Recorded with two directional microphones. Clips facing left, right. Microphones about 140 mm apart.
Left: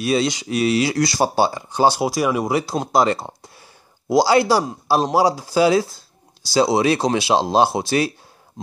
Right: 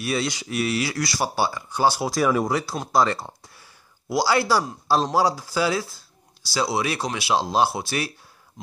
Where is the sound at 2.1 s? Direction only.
5° left (ahead or behind).